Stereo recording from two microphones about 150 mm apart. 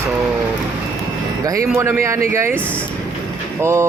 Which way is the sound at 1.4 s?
25° right (ahead or behind).